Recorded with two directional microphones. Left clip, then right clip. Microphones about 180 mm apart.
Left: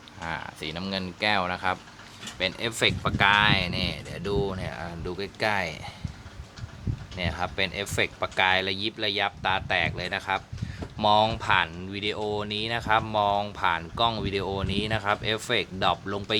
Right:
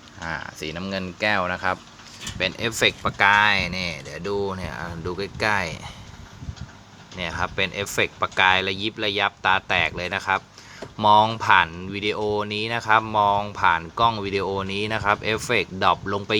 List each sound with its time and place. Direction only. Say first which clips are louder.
0.2 s speech: right 3 dB; 10° right (ahead or behind)
7.2 s speech: right 4 dB; 15° right (ahead or behind)